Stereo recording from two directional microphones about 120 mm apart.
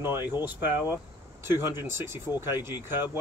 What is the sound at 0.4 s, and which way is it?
Speech, 15° right (ahead or behind).